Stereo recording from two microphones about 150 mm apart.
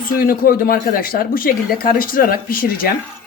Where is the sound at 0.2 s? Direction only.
75° left (ahead or behind).